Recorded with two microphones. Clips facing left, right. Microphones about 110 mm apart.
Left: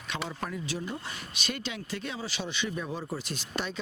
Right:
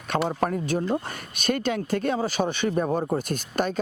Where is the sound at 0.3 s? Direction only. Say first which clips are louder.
Right 10 dB; 50° right (ahead or behind).